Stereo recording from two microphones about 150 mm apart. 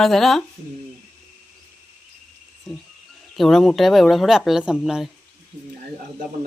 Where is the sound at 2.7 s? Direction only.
5° left (ahead or behind).